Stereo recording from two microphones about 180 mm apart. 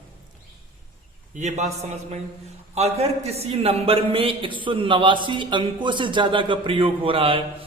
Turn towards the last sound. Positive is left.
turn(degrees=-30)  # may be behind; listen again after turning